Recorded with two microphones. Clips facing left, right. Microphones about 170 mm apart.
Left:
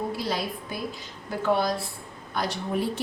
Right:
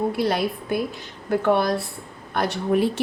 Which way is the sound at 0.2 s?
60° right (ahead or behind).